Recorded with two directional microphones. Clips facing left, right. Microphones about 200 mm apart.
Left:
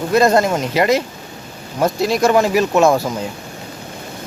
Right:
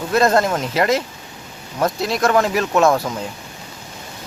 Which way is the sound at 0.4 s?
Centre (ahead or behind).